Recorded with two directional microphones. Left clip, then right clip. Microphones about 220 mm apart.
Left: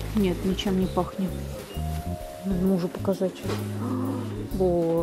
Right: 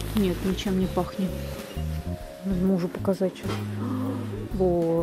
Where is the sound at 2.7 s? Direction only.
Centre (ahead or behind).